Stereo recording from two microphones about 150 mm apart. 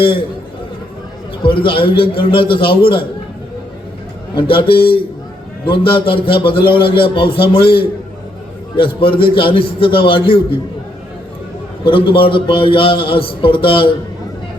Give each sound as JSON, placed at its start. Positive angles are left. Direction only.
{"t": 1.4, "sound": "a man's voice", "side_deg": 35}
{"t": 4.4, "sound": "a man's voice", "side_deg": 35}
{"t": 11.8, "sound": "a man's voice", "side_deg": 35}